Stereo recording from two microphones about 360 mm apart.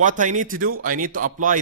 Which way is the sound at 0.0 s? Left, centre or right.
Right.